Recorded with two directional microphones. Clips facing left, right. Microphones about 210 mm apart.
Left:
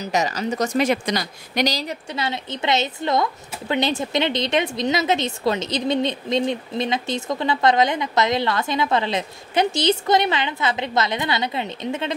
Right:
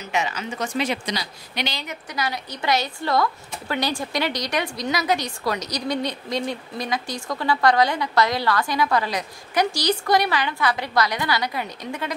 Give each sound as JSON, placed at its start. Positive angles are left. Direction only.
{"t": 0.0, "sound": "a woman's voice", "side_deg": 40}